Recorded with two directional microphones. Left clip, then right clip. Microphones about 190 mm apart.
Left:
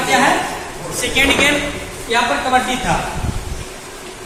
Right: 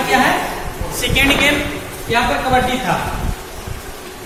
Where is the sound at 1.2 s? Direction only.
15° right (ahead or behind).